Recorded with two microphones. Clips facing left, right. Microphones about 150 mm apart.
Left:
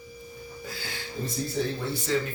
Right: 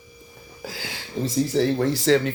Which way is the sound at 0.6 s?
90° right.